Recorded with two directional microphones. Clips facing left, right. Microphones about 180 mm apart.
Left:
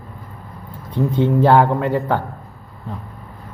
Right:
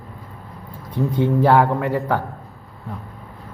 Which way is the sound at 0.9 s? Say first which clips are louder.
Left 2 dB; 25° left (ahead or behind).